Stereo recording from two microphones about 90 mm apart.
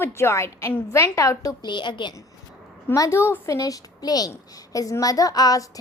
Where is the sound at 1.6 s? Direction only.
60° left (ahead or behind).